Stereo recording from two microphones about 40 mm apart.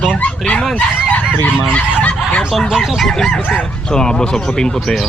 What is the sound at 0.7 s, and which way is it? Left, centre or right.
Fowl, left.